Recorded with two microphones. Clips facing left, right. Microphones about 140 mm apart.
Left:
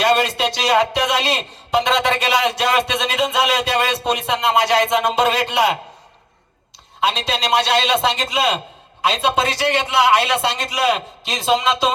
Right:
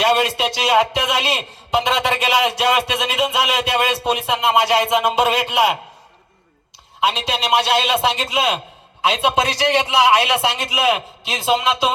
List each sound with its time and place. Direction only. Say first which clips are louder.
0.0 s a man's voice: even; 10° right (ahead or behind)
7.0 s a man's voice: even; 10° right (ahead or behind)